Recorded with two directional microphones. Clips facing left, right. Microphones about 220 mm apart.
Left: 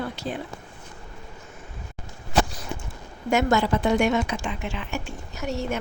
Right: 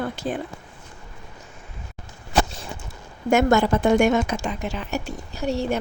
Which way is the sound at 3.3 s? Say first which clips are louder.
Right 4 dB; 50° right (ahead or behind).